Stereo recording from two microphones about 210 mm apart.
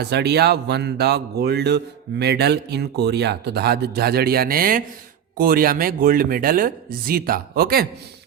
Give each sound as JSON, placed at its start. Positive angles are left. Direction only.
{"t": 0.0, "sound": "speech", "side_deg": -50}